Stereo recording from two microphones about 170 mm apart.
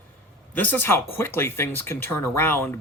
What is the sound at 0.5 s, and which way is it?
Speech, 10° left (ahead or behind).